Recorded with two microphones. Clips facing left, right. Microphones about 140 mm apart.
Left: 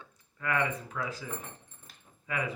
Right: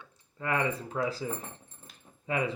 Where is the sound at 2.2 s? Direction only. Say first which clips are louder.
Right 4 dB; 30° right (ahead or behind).